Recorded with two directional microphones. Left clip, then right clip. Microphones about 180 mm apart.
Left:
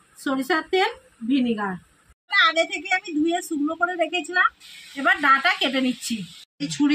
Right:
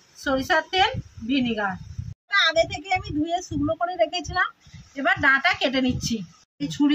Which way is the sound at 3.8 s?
25° right (ahead or behind).